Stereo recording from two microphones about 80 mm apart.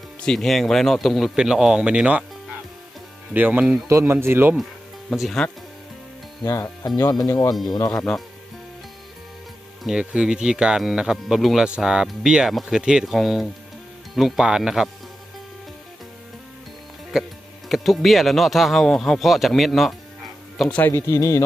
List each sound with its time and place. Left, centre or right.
0.2 s speech: centre
3.3 s speech: right
4.0 s speech: right
5.1 s speech: centre
6.4 s a man's voice: left
7.1 s speech: left
7.9 s speech: centre
9.8 s speech: centre
17.1 s speech: centre
20.8 s a man's voice: left